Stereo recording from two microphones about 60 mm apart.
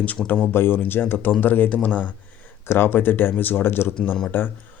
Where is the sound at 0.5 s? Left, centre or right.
Left.